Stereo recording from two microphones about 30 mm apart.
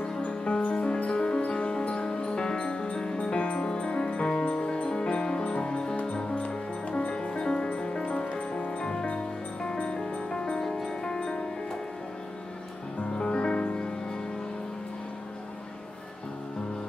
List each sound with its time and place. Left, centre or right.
0.1 s music: left
5.4 s music: left
5.7 s music: left
7.1 s music: left
13.0 s music: left